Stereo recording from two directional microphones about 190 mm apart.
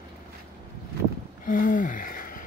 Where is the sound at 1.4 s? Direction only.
45° left (ahead or behind).